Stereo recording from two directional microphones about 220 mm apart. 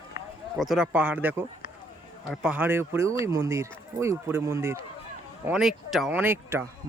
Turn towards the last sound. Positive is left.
turn(degrees=-10)  # may be behind; listen again after turning